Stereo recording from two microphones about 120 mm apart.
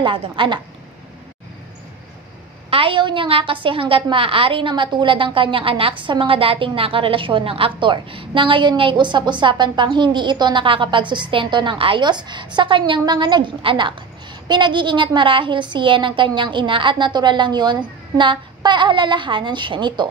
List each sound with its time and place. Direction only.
0.0 s a woman's voice: 45° right (ahead or behind)
2.7 s a woman's voice: 45° right (ahead or behind)